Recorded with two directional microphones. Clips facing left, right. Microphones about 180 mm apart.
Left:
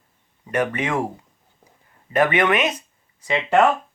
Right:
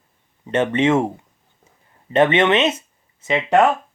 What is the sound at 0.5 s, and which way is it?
Speech, 25° right (ahead or behind).